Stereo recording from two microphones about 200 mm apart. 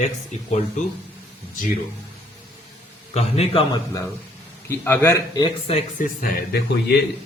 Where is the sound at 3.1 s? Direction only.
30° left (ahead or behind).